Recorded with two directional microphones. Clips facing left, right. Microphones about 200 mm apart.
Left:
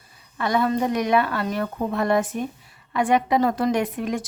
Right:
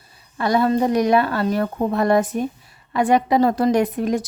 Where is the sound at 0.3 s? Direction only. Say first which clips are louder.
Right 4 dB; 35° right (ahead or behind).